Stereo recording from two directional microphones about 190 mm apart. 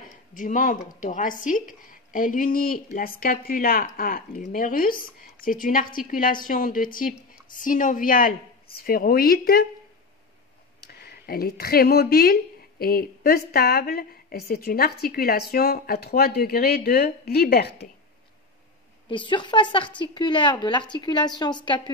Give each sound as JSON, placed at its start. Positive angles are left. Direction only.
{"t": 0.3, "sound": "speech", "side_deg": 45}
{"t": 10.8, "sound": "speech", "side_deg": 55}
{"t": 19.0, "sound": "a woman's voice", "side_deg": 25}